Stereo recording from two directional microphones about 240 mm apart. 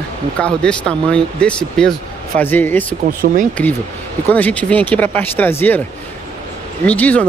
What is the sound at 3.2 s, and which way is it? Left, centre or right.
Speech, right.